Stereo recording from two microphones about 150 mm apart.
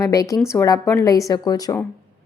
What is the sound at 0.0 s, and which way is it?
A woman's voice, 25° left (ahead or behind).